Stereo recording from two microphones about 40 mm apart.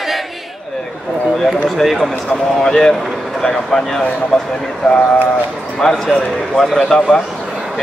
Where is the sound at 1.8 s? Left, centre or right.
Centre.